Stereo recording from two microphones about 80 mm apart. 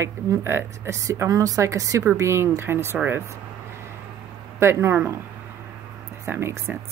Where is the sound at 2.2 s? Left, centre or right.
Right.